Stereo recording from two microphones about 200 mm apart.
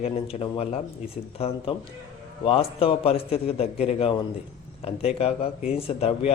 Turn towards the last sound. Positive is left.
turn(degrees=30)  # may be behind; listen again after turning